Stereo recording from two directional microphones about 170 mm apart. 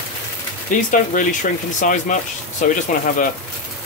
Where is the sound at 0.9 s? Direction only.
50° left (ahead or behind).